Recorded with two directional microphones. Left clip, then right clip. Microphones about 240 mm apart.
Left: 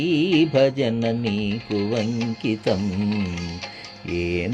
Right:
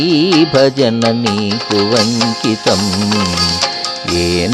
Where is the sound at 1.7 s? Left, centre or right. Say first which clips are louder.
Right 12 dB; right.